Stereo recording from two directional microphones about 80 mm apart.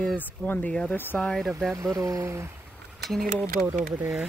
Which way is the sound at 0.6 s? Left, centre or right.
Centre.